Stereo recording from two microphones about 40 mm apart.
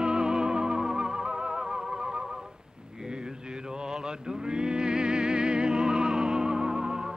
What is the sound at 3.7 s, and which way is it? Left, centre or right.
Music, centre.